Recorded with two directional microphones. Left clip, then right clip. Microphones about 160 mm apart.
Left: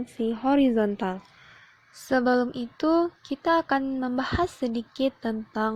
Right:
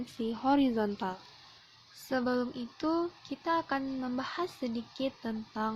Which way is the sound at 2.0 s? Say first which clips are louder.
Left 9 dB; 50° left (ahead or behind).